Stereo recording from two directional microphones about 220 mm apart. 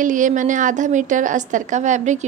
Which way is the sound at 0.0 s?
35° right (ahead or behind).